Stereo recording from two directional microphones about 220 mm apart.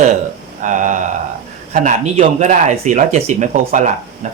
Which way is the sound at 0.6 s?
35° right (ahead or behind).